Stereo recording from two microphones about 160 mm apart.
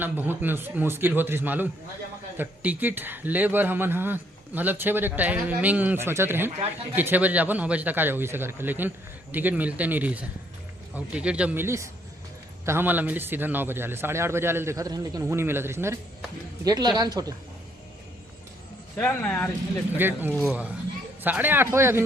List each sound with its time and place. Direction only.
0.0 s a man's voice: 10° right (ahead or behind)
18.9 s speech: 10° left (ahead or behind)
20.0 s a man's voice: 10° right (ahead or behind)